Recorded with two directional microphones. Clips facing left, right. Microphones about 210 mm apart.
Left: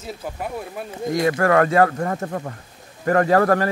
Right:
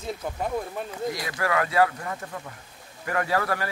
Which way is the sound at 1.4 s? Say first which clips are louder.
Left 5 dB; 50° left (ahead or behind).